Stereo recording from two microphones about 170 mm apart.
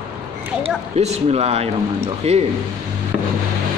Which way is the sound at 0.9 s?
40° right (ahead or behind).